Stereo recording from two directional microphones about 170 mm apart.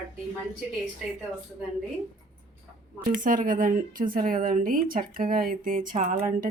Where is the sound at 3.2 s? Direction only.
50° right (ahead or behind).